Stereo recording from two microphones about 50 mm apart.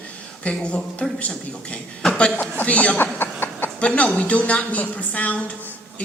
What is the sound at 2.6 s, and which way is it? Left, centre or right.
Speech, left.